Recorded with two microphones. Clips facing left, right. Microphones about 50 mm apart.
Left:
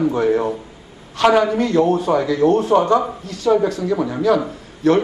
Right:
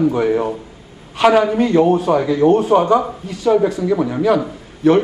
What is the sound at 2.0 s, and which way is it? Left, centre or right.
Speech, right.